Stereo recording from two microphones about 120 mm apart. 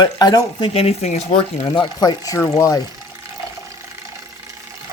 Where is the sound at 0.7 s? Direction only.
60° left (ahead or behind); by 2.7 s 25° left (ahead or behind).